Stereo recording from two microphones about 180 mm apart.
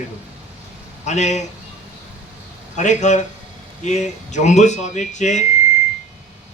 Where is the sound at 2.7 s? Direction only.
40° left (ahead or behind).